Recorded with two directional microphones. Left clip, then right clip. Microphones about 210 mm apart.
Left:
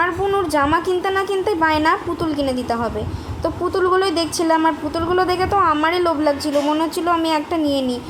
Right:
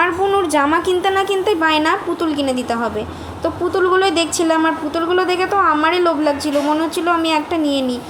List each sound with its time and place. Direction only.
0.0 s speech: 15° right (ahead or behind)